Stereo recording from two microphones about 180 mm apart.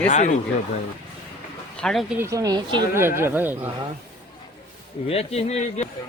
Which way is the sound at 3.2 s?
10° right (ahead or behind).